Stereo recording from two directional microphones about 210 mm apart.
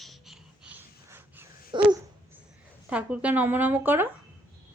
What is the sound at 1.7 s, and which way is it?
Babbling, 20° right (ahead or behind).